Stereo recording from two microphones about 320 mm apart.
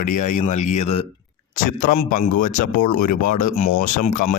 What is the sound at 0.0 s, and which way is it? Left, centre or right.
Speech, left.